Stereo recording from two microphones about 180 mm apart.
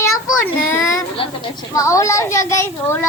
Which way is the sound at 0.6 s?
15° left (ahead or behind).